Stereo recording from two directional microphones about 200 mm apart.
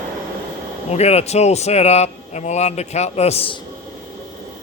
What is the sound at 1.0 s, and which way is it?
A man's voice, 30° left (ahead or behind).